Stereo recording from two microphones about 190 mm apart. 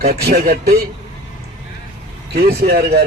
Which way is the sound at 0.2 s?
55° right (ahead or behind).